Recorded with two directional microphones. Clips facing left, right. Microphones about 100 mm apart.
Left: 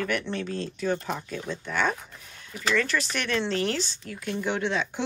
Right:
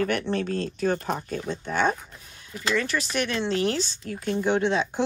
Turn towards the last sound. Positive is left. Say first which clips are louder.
# right 4 dB
turn(degrees=-25)  # may be behind; listen again after turning